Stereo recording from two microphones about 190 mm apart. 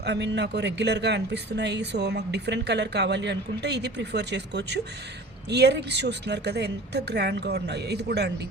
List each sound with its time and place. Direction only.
0.0 s speech: 65° right (ahead or behind)